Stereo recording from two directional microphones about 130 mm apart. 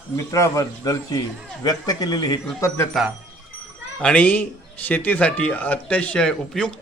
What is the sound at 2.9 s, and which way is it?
A man's voice, centre (ahead or behind).